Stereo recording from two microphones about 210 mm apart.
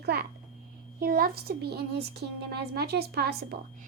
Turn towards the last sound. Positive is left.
turn(degrees=-50)  # may be behind; listen again after turning